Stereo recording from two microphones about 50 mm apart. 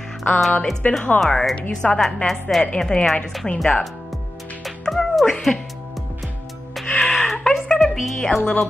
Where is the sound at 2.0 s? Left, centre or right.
Centre.